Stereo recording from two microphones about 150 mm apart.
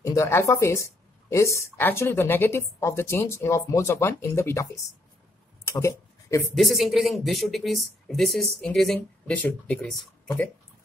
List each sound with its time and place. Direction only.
0.0 s speech: 20° left (ahead or behind)
6.5 s speech: centre (ahead or behind)